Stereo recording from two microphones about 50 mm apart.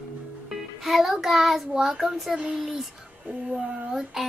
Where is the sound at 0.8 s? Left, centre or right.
Centre.